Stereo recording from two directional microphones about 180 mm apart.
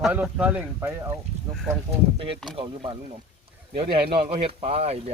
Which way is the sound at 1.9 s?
30° right (ahead or behind).